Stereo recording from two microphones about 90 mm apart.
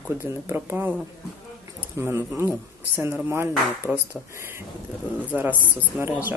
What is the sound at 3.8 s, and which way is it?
Speech, 20° left (ahead or behind).